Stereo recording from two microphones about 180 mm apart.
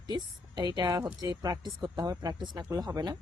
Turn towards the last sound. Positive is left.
turn(degrees=-25)  # may be behind; listen again after turning